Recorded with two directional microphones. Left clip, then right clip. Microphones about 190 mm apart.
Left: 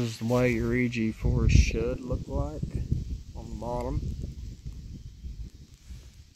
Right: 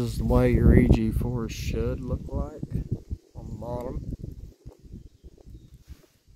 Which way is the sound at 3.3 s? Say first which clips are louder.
Left 1 dB; 10° right (ahead or behind).